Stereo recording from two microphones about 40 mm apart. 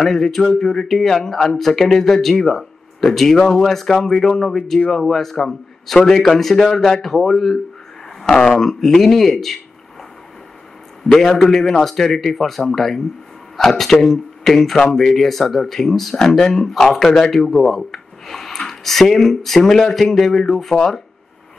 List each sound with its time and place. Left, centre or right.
0.0 s speech: centre
8.2 s speech: centre
11.1 s a man's voice: centre